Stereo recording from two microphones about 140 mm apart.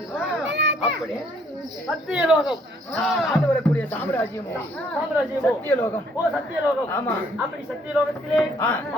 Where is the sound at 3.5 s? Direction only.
15° left (ahead or behind).